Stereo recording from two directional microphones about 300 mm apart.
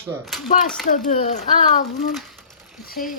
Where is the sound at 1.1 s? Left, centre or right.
Left.